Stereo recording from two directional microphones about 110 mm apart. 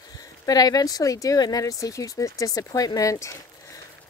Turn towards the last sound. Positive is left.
turn(degrees=25)  # may be behind; listen again after turning